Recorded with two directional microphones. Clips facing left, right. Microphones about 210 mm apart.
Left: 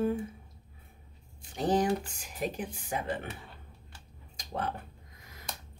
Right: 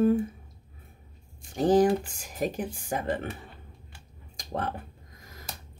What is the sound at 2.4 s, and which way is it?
Speech, 45° right (ahead or behind).